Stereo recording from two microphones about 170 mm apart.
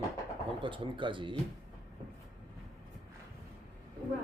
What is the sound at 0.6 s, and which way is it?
Speech, 30° right (ahead or behind).